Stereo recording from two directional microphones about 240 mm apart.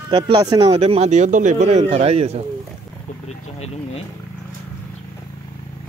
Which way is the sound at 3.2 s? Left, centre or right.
Left.